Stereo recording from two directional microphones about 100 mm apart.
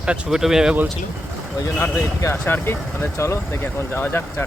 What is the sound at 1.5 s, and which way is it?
A man's voice, 30° left (ahead or behind).